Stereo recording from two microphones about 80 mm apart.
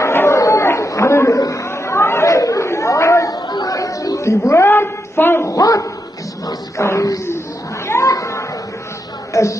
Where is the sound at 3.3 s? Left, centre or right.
Left.